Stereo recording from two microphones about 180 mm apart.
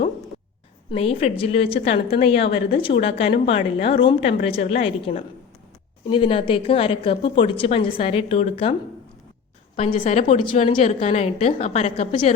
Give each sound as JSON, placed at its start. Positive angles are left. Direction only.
{"t": 0.9, "sound": "a woman's voice", "side_deg": 30}
{"t": 9.7, "sound": "a woman's voice", "side_deg": 35}